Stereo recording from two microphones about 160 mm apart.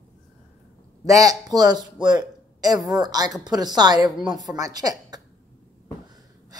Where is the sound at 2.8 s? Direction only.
25° right (ahead or behind).